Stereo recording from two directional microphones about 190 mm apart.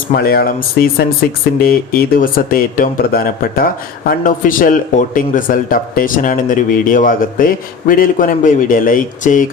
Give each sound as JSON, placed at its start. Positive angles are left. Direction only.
{"t": 0.1, "sound": "speech", "side_deg": 50}